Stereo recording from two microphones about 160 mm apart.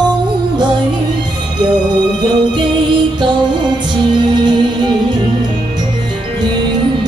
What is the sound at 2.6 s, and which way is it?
Music, 30° right (ahead or behind).